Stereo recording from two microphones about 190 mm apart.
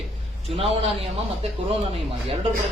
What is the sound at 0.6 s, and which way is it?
Speech, 30° right (ahead or behind).